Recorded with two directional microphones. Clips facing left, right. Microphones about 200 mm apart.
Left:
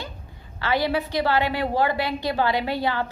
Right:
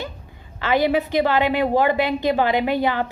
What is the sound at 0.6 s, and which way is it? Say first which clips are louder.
A woman's voice: right 4 dB; 20° right (ahead or behind).